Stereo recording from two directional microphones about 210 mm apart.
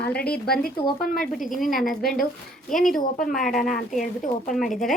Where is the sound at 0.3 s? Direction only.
45° left (ahead or behind).